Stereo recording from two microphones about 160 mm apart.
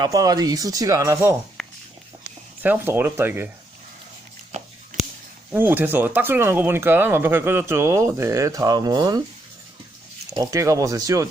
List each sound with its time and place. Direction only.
0.0 s speech: 25° right (ahead or behind)
1.6 s a sound: centre (ahead or behind)
2.6 s speech: 15° right (ahead or behind)
5.5 s speech: 10° right (ahead or behind)
10.2 s speech: 25° right (ahead or behind)